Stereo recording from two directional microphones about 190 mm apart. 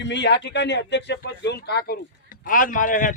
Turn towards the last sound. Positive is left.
turn(degrees=45)  # may be behind; listen again after turning